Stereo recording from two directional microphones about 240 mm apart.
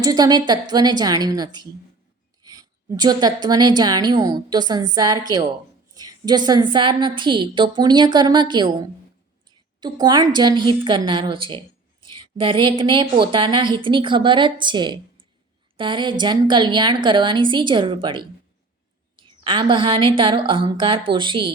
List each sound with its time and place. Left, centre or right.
0.0 s a woman's voice: centre
9.8 s a woman's voice: centre
19.5 s a woman's voice: centre